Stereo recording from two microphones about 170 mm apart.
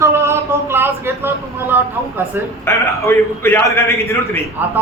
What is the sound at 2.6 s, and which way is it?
A man's voice, 15° left (ahead or behind).